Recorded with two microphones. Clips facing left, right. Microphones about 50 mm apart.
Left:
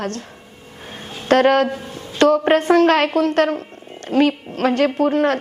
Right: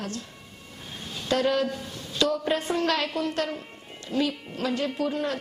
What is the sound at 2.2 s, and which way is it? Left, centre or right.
Speech, left.